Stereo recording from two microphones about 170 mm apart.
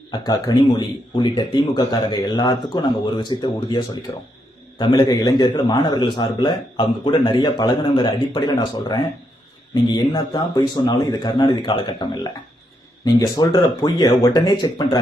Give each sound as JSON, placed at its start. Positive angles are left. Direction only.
{"t": 0.1, "sound": "a man's voice", "side_deg": 25}